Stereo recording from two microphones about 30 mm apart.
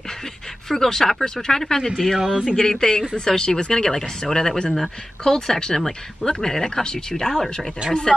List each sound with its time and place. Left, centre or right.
0.7 s speech: centre
1.8 s speech: centre
2.1 s speech: centre
2.5 s speech: centre
3.9 s speech: centre
7.2 s speech: centre